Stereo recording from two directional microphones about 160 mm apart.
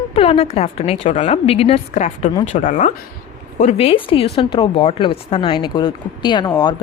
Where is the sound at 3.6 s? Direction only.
35° left (ahead or behind).